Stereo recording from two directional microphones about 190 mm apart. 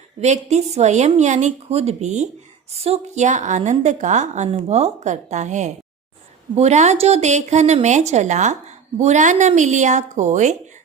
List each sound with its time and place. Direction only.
0.2 s speech: 35° right (ahead or behind)